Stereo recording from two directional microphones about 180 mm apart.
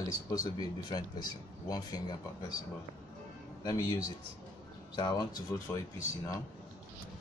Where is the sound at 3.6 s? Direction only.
20° left (ahead or behind).